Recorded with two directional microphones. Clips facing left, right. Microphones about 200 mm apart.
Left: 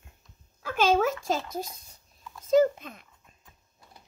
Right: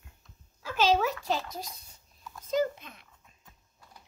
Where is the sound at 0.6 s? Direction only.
50° left (ahead or behind).